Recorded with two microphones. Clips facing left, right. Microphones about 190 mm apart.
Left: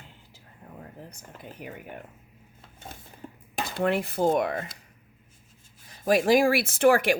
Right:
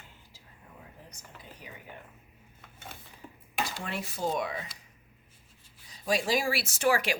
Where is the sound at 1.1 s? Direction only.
55° left (ahead or behind).